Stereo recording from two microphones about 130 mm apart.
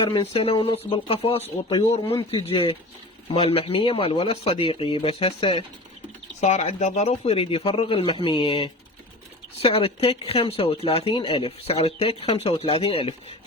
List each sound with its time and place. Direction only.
0.0 s speech: 45° left (ahead or behind)
6.4 s speech: 60° left (ahead or behind); by 13.1 s 45° left (ahead or behind)